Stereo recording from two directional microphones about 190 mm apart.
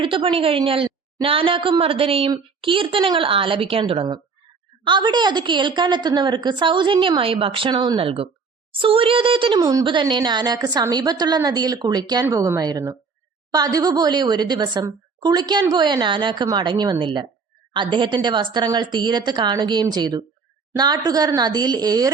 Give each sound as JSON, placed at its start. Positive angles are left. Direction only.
{"t": 0.0, "sound": "speech", "side_deg": -25}